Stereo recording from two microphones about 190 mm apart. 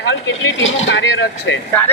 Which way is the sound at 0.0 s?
75° left (ahead or behind).